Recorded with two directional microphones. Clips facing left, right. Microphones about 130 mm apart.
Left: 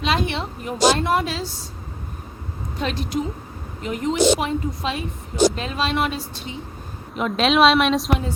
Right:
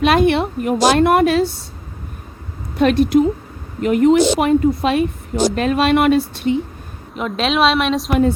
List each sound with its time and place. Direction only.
0.0 s a woman's voice: 60° right (ahead or behind)
2.7 s a woman's voice: 60° right (ahead or behind)
7.2 s a woman's voice: centre (ahead or behind)